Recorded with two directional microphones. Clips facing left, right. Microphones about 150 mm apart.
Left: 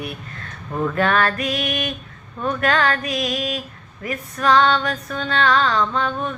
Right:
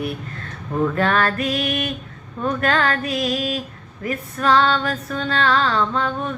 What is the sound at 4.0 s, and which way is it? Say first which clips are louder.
Female singing: even; 30° right (ahead or behind).